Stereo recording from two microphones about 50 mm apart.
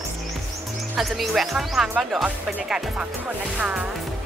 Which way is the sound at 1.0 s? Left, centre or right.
Centre.